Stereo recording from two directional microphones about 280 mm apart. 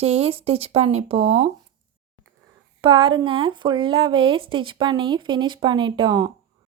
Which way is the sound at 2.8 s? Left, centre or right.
Centre.